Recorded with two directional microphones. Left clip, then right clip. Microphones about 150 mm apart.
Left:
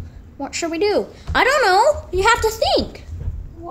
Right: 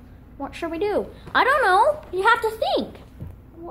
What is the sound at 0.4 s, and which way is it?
A woman's voice, 15° left (ahead or behind).